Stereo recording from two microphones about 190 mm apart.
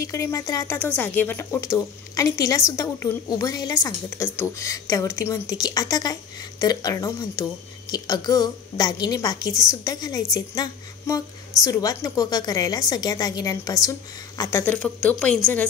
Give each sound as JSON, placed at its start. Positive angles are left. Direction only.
{"t": 0.0, "sound": "a woman's voice", "side_deg": 15}